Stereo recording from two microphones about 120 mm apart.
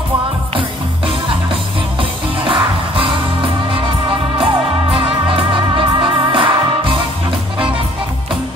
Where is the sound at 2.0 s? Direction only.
45° right (ahead or behind).